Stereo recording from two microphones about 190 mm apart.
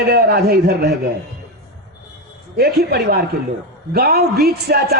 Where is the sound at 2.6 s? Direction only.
55° right (ahead or behind).